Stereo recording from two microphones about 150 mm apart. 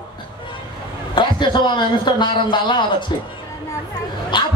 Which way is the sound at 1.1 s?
35° left (ahead or behind).